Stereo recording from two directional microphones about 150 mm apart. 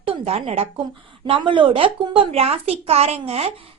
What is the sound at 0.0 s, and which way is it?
A woman's voice, 40° right (ahead or behind).